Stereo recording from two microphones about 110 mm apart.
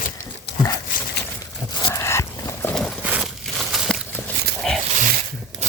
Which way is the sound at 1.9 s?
25° left (ahead or behind).